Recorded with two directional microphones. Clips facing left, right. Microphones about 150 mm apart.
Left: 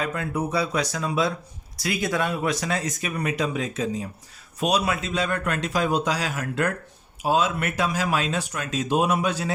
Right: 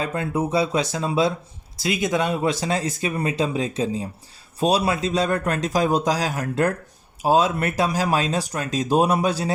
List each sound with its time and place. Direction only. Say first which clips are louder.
0.0 s speech: right 3 dB; 30° right (ahead or behind)